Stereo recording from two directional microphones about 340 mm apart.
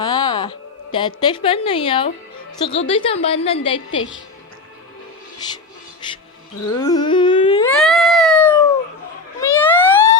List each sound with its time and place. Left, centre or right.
0.0 s a woman's voice: centre
6.7 s cat: centre
9.4 s a sound: centre